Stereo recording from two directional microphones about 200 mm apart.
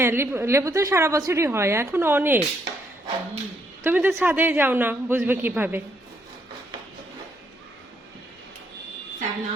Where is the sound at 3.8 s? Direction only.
10° right (ahead or behind).